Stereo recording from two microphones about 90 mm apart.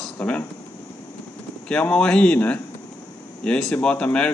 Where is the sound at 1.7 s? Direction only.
10° left (ahead or behind).